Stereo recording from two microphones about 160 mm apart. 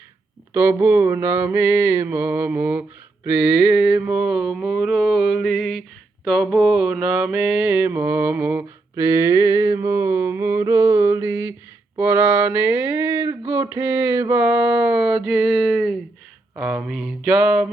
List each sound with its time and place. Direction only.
0.5 s mantra: 15° right (ahead or behind)